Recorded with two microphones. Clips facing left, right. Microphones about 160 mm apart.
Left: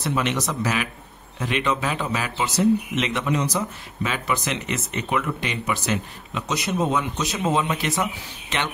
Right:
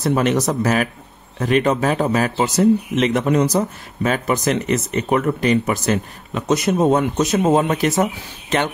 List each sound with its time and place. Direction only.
0.0 s speech: 45° right (ahead or behind)